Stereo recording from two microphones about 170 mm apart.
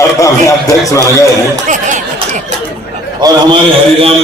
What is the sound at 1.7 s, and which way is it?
Speech, 45° right (ahead or behind).